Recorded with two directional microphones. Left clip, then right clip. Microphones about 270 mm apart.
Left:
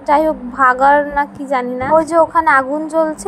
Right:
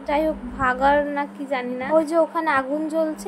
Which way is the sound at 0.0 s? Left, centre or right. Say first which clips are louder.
Left 9 dB; centre.